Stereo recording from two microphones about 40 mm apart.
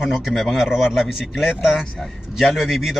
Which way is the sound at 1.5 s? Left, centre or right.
Centre.